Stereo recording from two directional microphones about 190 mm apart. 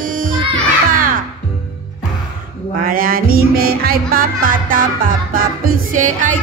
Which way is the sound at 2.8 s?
50° right (ahead or behind).